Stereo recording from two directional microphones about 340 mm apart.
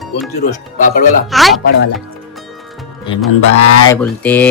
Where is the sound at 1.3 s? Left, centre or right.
Centre.